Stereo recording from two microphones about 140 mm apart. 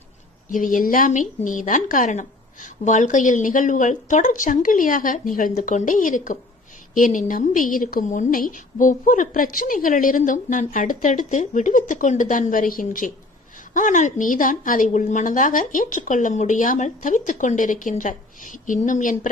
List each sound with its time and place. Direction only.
0.4 s a woman's voice: 70° left (ahead or behind)